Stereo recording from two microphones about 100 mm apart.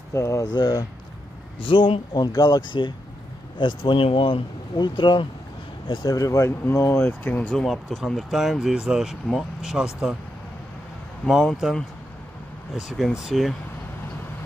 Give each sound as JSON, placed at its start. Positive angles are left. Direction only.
{"t": 0.1, "sound": "speech", "side_deg": 30}
{"t": 0.6, "sound": "speech", "side_deg": 45}
{"t": 1.6, "sound": "speech", "side_deg": 60}
{"t": 2.1, "sound": "speech", "side_deg": 40}
{"t": 4.7, "sound": "speech", "side_deg": 50}
{"t": 5.9, "sound": "speech", "side_deg": 35}
{"t": 7.5, "sound": "speech", "side_deg": 0}
{"t": 11.2, "sound": "speech", "side_deg": 0}
{"t": 12.8, "sound": "speech", "side_deg": 0}